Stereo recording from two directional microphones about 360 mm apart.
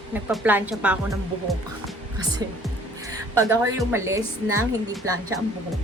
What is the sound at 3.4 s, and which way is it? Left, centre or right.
A woman's voice, centre.